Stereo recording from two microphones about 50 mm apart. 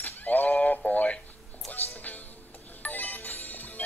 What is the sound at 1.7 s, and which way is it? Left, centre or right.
Music, left.